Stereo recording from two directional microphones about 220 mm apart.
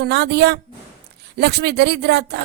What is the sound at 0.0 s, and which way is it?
Speech, 50° right (ahead or behind).